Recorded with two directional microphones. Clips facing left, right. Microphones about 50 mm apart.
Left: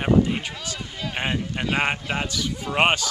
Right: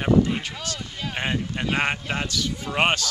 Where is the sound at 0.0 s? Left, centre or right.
Centre.